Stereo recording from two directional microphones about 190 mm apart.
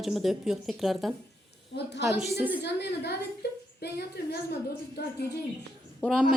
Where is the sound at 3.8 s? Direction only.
60° left (ahead or behind).